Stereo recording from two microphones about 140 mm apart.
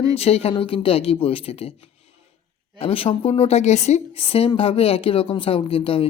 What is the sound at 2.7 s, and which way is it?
Speech, 40° left (ahead or behind).